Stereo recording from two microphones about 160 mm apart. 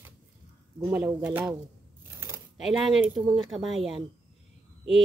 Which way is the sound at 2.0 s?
15° right (ahead or behind).